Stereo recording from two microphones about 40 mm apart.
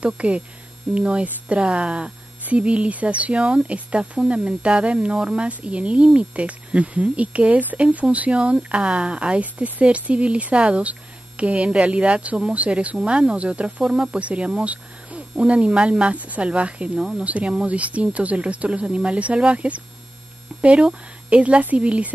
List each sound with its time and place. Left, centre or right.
0.0 s speech: right
5.1 s speech: centre
5.4 s speech: right
9.4 s speech: right